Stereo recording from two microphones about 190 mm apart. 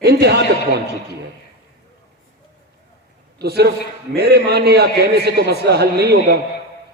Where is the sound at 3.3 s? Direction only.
60° right (ahead or behind).